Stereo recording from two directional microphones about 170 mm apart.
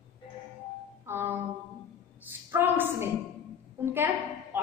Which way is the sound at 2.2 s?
10° right (ahead or behind).